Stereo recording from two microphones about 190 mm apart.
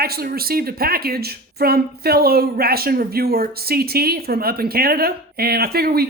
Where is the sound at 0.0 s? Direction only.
55° right (ahead or behind).